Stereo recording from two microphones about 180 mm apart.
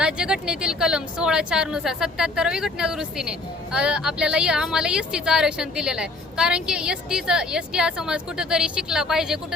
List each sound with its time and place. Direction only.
0.0 s a woman's voice: 5° right (ahead or behind)